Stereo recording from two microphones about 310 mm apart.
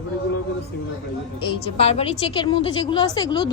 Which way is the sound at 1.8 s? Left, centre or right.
Centre.